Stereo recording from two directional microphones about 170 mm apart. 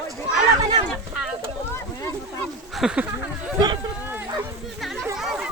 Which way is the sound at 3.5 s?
25° right (ahead or behind).